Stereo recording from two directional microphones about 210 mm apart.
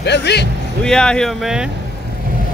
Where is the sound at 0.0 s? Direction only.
55° left (ahead or behind).